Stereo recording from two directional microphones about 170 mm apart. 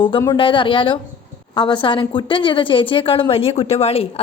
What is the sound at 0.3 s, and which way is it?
A woman's voice, 30° left (ahead or behind).